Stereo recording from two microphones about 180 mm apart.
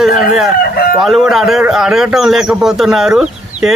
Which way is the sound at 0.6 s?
60° left (ahead or behind).